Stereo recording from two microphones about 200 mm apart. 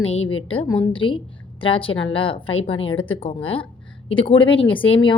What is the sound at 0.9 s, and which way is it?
A woman's voice, 25° left (ahead or behind).